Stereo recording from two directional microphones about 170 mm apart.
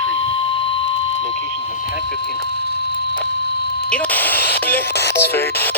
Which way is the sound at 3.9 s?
10° left (ahead or behind).